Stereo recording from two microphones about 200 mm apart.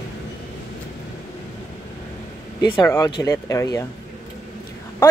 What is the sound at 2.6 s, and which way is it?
Speech, 20° left (ahead or behind).